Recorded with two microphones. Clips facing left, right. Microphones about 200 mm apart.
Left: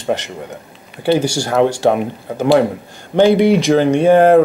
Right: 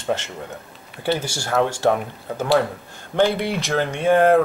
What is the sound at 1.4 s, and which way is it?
Speech, 15° left (ahead or behind).